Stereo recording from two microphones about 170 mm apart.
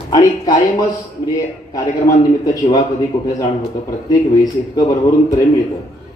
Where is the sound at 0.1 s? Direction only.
25° left (ahead or behind).